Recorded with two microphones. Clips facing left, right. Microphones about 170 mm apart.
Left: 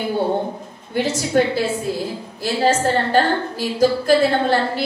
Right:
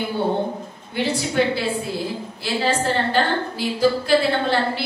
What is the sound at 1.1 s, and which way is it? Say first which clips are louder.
A woman's voice: left 3 dB; 45° left (ahead or behind).